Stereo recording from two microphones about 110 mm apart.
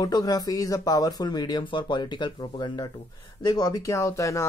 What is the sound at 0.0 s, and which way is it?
Speech, 35° left (ahead or behind).